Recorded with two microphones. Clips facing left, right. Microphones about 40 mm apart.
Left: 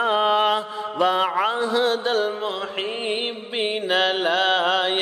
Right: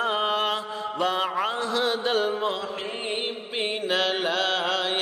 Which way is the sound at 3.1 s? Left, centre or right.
Centre.